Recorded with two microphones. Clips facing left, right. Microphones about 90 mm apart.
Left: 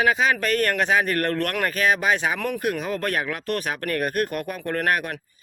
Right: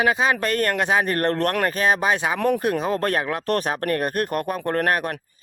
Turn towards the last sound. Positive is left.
turn(degrees=-35)  # may be behind; listen again after turning